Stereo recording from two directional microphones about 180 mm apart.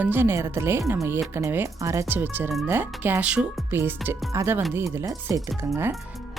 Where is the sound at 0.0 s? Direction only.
10° right (ahead or behind).